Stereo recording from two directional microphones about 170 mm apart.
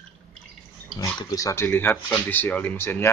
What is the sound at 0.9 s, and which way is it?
Speech, 20° left (ahead or behind).